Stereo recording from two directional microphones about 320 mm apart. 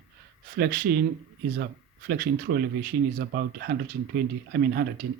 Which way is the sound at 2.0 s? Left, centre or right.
Right.